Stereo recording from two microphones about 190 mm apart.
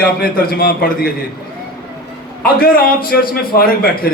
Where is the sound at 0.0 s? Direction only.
50° left (ahead or behind).